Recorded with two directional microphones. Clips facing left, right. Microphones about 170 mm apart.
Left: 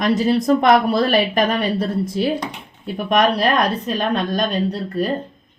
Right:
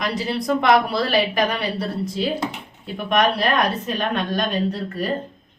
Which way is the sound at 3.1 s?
40° left (ahead or behind).